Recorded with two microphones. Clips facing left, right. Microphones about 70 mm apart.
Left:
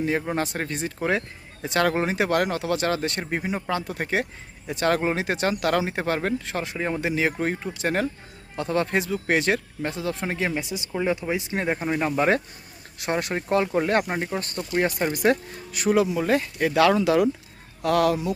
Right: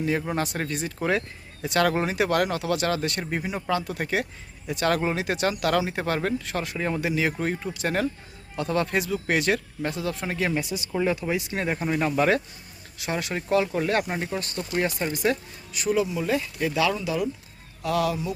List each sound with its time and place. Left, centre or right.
0.3 s speech: left
7.0 s speech: left
13.0 s speech: left
13.3 s speech: left
15.1 s speech: left
17.8 s speech: left